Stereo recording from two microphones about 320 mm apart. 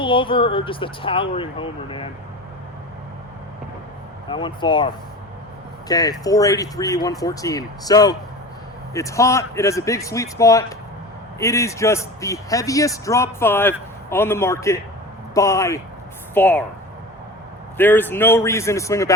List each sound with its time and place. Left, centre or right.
0.0 s speech: centre
4.3 s speech: centre
5.9 s speech: centre
17.7 s speech: centre